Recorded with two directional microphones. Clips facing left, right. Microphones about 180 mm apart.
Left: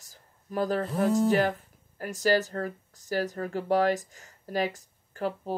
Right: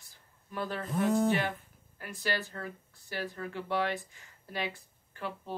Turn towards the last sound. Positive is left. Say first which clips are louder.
# left 8 dB
turn(degrees=40)  # may be behind; listen again after turning